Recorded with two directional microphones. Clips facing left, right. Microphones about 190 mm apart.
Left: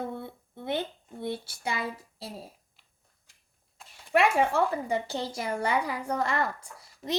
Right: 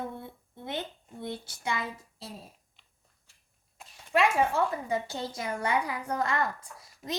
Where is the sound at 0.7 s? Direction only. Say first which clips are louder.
Left 5 dB; 30° left (ahead or behind).